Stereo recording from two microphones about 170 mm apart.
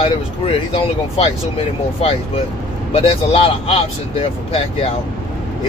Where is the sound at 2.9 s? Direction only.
30° left (ahead or behind).